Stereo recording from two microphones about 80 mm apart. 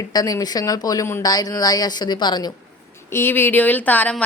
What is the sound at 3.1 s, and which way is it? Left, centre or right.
Speech, left.